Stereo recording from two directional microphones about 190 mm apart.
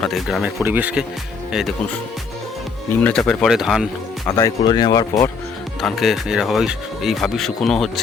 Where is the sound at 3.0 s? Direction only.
5° left (ahead or behind).